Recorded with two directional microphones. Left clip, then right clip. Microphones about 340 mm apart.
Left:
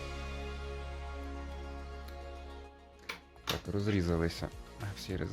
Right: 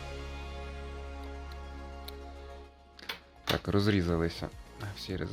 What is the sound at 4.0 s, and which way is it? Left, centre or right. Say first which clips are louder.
Speech: right 2 dB; centre.